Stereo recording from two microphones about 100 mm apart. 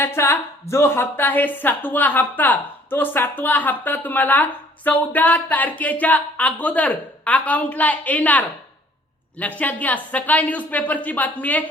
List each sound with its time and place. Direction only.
0.0 s a woman's voice: 25° left (ahead or behind)
9.6 s a woman's voice: 15° left (ahead or behind)